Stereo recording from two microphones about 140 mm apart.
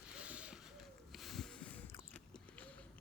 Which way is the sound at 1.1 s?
Centre (ahead or behind).